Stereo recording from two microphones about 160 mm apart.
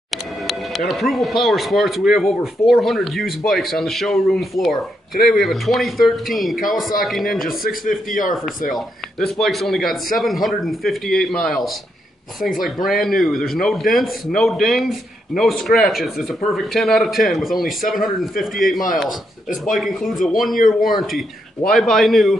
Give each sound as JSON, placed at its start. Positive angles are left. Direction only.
{"t": 0.5, "sound": "a man's voice", "side_deg": 0}
{"t": 8.1, "sound": "speech", "side_deg": 55}
{"t": 8.7, "sound": "a man's voice", "side_deg": 0}
{"t": 20.5, "sound": "speech", "side_deg": 60}
{"t": 21.6, "sound": "a man's voice", "side_deg": 0}